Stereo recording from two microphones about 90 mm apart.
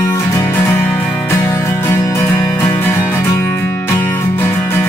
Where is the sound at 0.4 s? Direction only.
25° left (ahead or behind).